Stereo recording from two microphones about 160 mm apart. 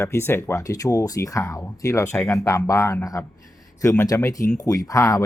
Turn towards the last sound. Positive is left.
turn(degrees=20)  # may be behind; listen again after turning